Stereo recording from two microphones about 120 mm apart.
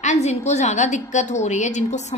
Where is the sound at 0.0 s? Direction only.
75° left (ahead or behind).